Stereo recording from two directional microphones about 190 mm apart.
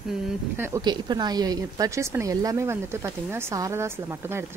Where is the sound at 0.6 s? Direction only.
20° right (ahead or behind).